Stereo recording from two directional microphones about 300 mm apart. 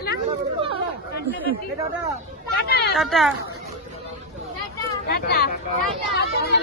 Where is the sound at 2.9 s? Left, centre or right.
Centre.